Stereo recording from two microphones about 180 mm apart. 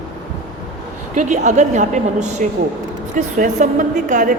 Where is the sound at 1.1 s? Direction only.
40° right (ahead or behind).